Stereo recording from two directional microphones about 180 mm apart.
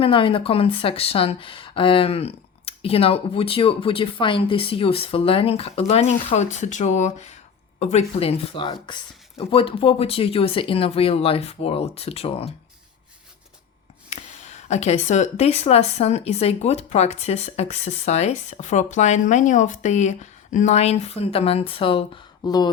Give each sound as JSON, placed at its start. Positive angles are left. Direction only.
{"t": 0.0, "sound": "speech", "side_deg": 30}
{"t": 14.1, "sound": "speech", "side_deg": 35}